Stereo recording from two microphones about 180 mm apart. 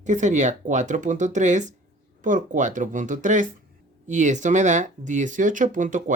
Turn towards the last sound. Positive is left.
turn(degrees=-45)  # may be behind; listen again after turning